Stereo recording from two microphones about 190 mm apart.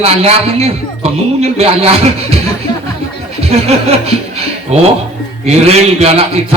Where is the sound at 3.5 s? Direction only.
35° right (ahead or behind).